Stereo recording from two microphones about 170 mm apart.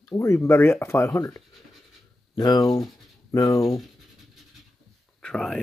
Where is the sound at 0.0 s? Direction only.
20° left (ahead or behind).